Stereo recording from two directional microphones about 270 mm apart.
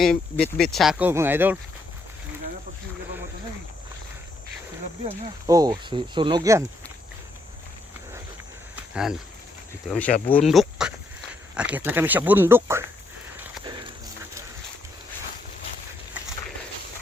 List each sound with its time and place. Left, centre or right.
0.0 s speech: centre
5.0 s speech: centre
8.7 s a sound: centre
10.1 s speech: left
10.3 s speech: centre